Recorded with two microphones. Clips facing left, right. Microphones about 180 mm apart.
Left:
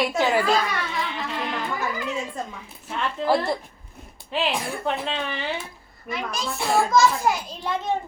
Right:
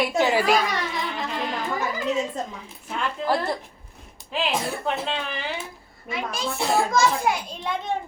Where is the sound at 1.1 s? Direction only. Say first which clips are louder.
Right 1 dB; centre (ahead or behind).